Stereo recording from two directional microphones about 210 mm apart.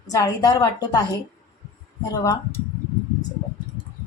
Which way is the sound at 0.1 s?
15° left (ahead or behind).